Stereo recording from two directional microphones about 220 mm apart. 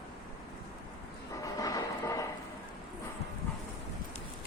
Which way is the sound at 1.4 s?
15° left (ahead or behind).